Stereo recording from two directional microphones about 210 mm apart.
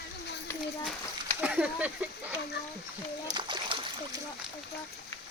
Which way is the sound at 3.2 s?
20° right (ahead or behind).